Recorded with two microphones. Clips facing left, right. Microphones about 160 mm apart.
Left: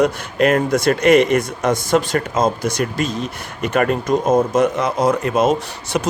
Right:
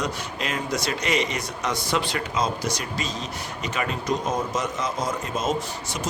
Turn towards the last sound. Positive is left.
turn(degrees=65)  # may be behind; listen again after turning